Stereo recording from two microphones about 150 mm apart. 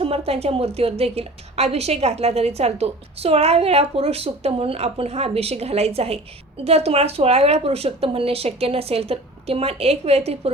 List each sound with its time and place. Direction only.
0.0 s a woman's voice: 40° right (ahead or behind)